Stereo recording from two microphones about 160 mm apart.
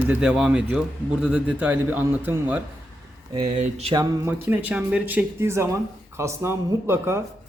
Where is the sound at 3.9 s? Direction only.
20° right (ahead or behind).